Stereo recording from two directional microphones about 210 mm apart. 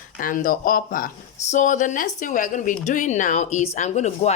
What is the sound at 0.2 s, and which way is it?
A woman's voice, 40° left (ahead or behind).